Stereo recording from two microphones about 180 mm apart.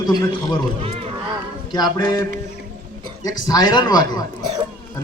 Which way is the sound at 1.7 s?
25° left (ahead or behind).